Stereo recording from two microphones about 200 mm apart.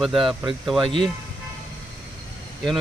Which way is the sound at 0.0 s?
Centre (ahead or behind).